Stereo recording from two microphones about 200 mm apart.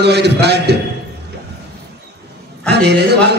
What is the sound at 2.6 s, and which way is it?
Speech, 55° right (ahead or behind).